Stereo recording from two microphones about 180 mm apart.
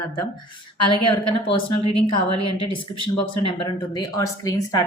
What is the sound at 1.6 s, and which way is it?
A woman's voice, 30° left (ahead or behind).